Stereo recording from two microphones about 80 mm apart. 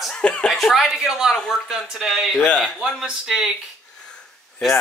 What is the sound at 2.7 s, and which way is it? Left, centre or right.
Speech, centre.